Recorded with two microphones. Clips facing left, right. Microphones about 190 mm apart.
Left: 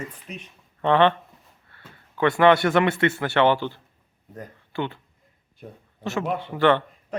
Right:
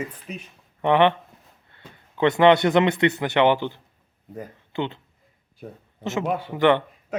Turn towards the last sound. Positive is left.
turn(degrees=-15)  # may be behind; listen again after turning